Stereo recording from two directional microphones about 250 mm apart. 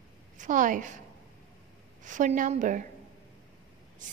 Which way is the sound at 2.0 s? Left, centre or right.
Right.